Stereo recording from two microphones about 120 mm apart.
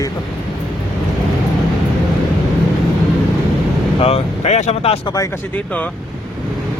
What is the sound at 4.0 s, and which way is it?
Speech, 55° left (ahead or behind).